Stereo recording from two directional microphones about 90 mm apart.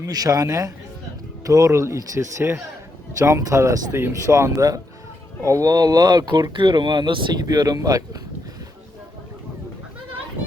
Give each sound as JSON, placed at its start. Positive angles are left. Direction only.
{"t": 0.0, "sound": "speech", "side_deg": -40}
{"t": 7.4, "sound": "speech", "side_deg": -45}